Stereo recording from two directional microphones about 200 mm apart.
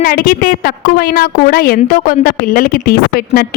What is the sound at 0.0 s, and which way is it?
A woman's voice, 45° left (ahead or behind).